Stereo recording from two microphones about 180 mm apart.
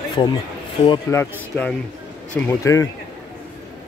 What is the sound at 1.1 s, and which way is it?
Speech, 10° left (ahead or behind).